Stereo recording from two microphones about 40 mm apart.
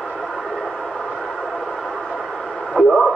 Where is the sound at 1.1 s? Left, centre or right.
Centre.